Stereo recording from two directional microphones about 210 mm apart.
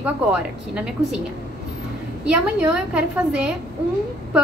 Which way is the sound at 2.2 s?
5° right (ahead or behind).